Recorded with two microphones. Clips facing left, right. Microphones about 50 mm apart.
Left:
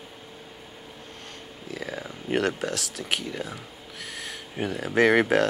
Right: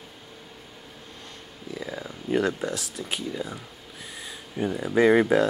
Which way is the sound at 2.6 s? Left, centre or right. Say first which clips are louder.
Even; left.